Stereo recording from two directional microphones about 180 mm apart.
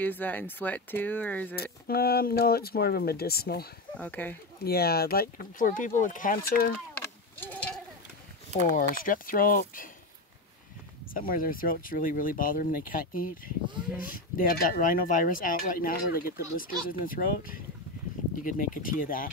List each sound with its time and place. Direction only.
0.0 s speech: 10° left (ahead or behind)
1.6 s speech: 60° left (ahead or behind)
3.9 s speech: 10° left (ahead or behind)
4.6 s speech: 60° left (ahead or behind)
7.0 s sheep: 10° left (ahead or behind)
8.7 s speech: 50° left (ahead or behind)
11.1 s speech: 50° left (ahead or behind)